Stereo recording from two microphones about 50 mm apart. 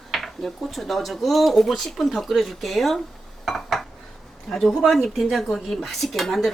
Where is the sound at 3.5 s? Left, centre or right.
Centre.